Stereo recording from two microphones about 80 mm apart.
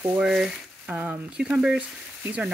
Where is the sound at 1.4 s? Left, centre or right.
Centre.